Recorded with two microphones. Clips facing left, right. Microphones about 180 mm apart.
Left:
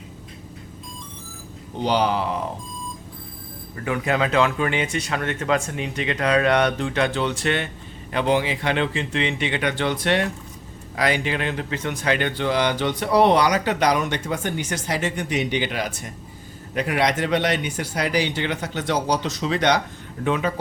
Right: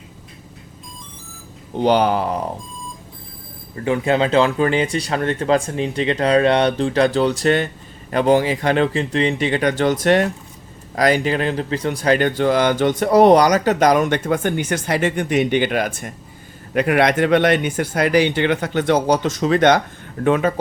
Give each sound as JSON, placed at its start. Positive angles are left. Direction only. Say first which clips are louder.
{"t": 1.8, "sound": "speech", "louder": "right 5 dB", "side_deg": -55}
{"t": 3.8, "sound": "speech", "louder": "right 5 dB", "side_deg": -30}